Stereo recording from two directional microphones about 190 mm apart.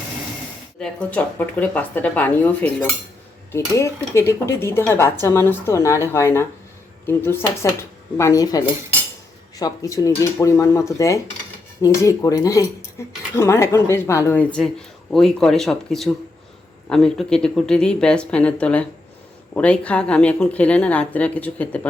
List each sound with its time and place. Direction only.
0.8 s speech: 5° left (ahead or behind)